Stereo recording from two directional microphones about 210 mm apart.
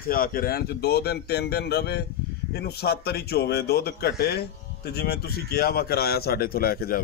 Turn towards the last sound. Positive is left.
turn(degrees=45)  # may be behind; listen again after turning